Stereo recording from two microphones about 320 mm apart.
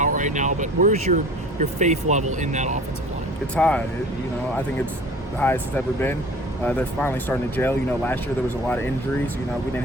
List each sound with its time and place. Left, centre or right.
0.0 s speech: right
3.5 s speech: centre
5.4 s speech: centre